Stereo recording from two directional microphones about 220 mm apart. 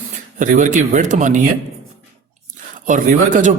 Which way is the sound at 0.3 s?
35° right (ahead or behind).